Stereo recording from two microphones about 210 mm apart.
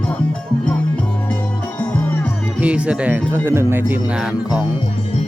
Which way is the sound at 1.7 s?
10° left (ahead or behind).